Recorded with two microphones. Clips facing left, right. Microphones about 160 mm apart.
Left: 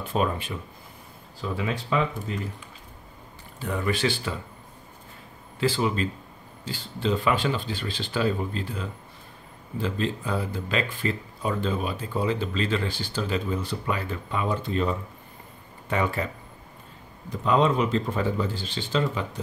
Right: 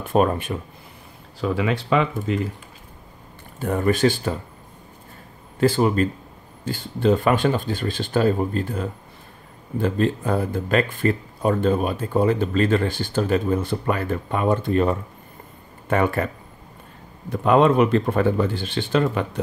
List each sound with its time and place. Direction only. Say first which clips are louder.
0.0 s speech: right 7 dB; 50° right (ahead or behind)
1.4 s speech: right 7 dB; 80° right
3.5 s speech: right 7 dB; 50° right (ahead or behind)
5.6 s speech: right 7 dB; 50° right (ahead or behind)
17.3 s speech: right 6 dB; 60° right (ahead or behind)